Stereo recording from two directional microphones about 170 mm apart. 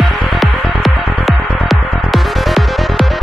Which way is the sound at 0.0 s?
Centre (ahead or behind).